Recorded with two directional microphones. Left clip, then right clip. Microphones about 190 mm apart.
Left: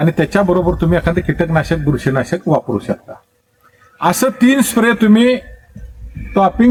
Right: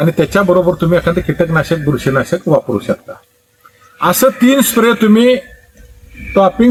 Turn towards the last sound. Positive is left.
turn(degrees=0)  # may be behind; listen again after turning